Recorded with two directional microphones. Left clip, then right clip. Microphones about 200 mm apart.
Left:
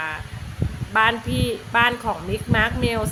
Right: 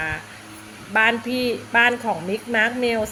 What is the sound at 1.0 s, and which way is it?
Speech, 45° left (ahead or behind).